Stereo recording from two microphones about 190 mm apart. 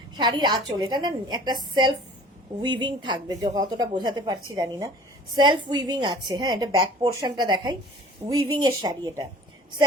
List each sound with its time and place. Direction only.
0.2 s a woman's voice: 25° right (ahead or behind)